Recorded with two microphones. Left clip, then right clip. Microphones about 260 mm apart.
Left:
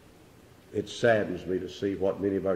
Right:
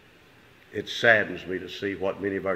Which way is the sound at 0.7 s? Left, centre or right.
Centre.